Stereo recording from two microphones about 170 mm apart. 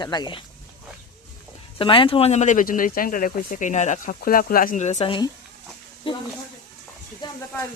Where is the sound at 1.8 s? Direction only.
30° left (ahead or behind).